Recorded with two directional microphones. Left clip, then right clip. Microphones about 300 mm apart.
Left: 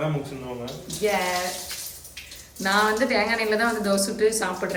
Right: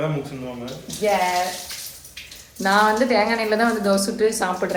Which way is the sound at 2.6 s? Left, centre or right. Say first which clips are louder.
Right 4 dB; centre.